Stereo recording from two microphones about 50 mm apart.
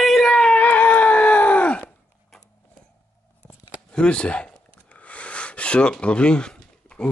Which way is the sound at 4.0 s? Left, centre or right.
Left.